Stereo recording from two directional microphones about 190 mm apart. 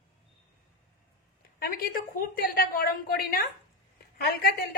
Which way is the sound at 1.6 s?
50° left (ahead or behind).